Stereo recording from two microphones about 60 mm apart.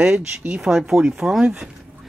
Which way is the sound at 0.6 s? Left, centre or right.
Centre.